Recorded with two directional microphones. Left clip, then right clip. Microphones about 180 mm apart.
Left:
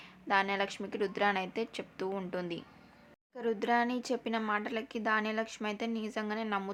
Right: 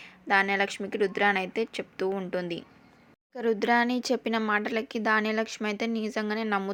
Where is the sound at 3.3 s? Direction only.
30° right (ahead or behind).